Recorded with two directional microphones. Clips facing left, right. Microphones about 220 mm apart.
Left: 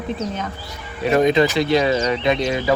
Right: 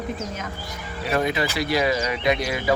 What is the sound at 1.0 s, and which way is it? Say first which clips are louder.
Speech: left 8 dB; 20° left (ahead or behind).